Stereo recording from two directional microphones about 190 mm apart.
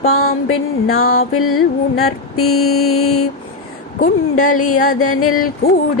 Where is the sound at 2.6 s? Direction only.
90° left.